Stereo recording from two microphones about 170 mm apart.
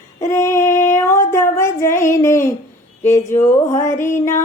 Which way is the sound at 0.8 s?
15° left (ahead or behind).